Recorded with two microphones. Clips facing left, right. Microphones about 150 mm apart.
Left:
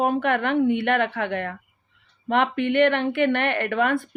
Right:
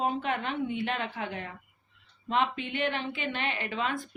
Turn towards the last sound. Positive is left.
turn(degrees=60)  # may be behind; listen again after turning